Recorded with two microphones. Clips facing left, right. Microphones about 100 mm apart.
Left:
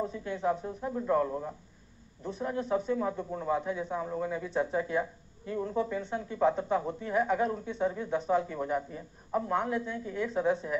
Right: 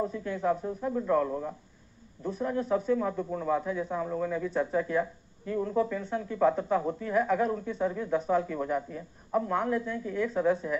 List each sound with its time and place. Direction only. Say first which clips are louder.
0.1 s speech: right 2 dB; 20° left (ahead or behind)
2.7 s speech: right 2 dB; 20° left (ahead or behind)